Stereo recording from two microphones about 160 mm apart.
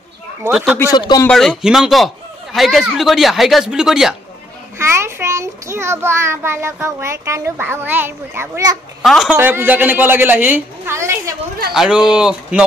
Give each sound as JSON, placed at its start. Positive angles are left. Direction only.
{"t": 0.4, "sound": "speech", "side_deg": -5}
{"t": 0.7, "sound": "speech", "side_deg": 25}
{"t": 1.2, "sound": "speech", "side_deg": 0}
{"t": 4.7, "sound": "a child's voice", "side_deg": -15}
{"t": 9.0, "sound": "speech", "side_deg": 0}
{"t": 9.4, "sound": "a child's voice", "side_deg": -15}
{"t": 11.7, "sound": "speech", "side_deg": -5}